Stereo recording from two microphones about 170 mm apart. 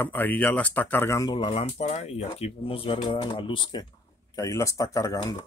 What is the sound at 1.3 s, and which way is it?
Speech, 35° left (ahead or behind).